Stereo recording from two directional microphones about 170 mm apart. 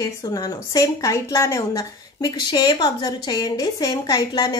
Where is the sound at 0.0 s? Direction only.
20° left (ahead or behind).